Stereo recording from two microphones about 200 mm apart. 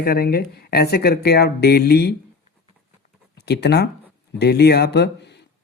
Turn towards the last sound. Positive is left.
turn(degrees=55)  # may be behind; listen again after turning